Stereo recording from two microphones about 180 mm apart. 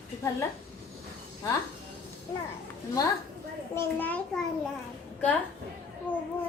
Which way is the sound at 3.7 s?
10° left (ahead or behind).